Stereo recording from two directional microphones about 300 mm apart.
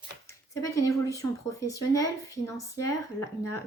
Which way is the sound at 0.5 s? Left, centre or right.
Centre.